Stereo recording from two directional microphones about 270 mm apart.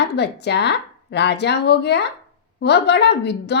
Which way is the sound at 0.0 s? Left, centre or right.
Left.